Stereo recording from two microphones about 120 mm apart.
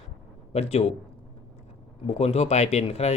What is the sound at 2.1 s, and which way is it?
Speech, 60° left (ahead or behind).